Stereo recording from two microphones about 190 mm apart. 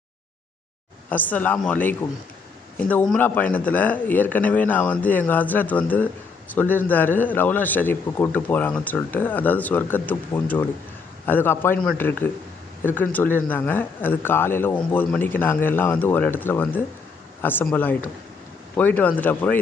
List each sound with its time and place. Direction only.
1.1 s a man's voice: 10° left (ahead or behind)